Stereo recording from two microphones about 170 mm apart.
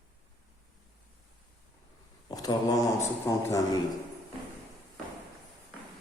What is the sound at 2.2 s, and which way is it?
Mantra, 25° left (ahead or behind).